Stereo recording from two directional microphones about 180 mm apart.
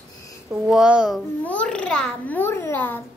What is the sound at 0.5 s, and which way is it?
A child's voice, 5° right (ahead or behind).